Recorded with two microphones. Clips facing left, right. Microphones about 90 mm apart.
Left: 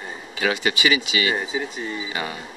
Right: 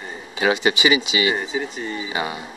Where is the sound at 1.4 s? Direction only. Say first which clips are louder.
Right 1 dB; centre (ahead or behind).